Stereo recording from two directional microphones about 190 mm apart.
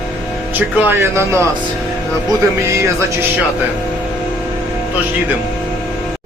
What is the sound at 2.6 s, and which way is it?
Speech, 15° right (ahead or behind).